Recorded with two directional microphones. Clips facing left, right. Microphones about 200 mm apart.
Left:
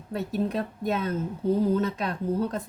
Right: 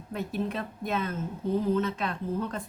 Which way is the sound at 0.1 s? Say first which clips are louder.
Left 4 dB; 40° left (ahead or behind).